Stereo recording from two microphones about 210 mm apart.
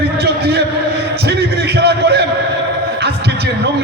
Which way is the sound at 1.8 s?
50° right (ahead or behind).